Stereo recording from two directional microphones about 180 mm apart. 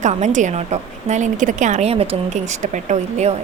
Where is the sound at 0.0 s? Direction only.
40° right (ahead or behind).